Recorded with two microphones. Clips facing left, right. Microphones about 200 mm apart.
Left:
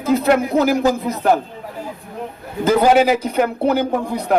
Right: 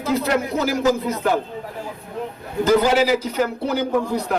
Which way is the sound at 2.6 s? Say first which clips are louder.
Left 3 dB; 55° left (ahead or behind).